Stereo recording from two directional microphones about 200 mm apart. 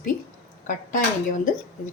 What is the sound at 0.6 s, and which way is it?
Speech, 40° left (ahead or behind).